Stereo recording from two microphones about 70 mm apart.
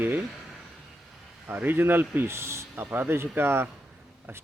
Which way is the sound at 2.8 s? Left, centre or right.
Right.